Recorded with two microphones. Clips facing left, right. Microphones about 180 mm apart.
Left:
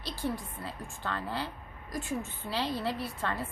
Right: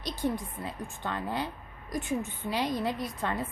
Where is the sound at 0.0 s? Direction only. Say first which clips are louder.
Right 3 dB; 20° right (ahead or behind).